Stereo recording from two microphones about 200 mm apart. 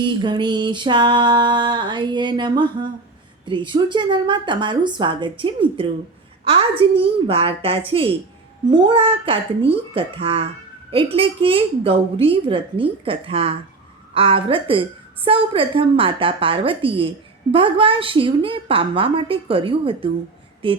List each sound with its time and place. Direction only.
0.0 s a woman's voice: 20° right (ahead or behind)